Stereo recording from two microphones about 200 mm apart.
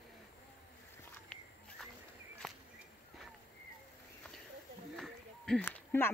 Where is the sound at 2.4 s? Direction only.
Centre (ahead or behind).